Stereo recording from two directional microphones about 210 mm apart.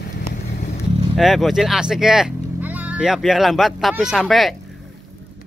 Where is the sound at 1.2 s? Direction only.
Centre (ahead or behind).